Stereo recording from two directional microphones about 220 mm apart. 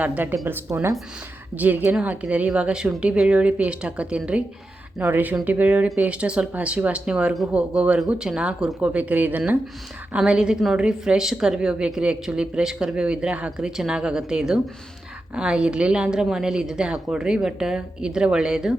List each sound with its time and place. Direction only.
0.0 s speech: 10° right (ahead or behind)